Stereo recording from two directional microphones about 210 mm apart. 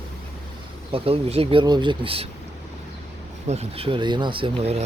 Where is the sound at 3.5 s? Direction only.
30° right (ahead or behind).